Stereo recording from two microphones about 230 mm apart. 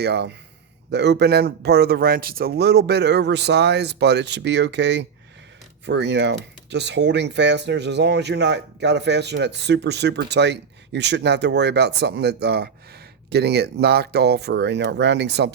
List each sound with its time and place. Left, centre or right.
0.0 s speech: right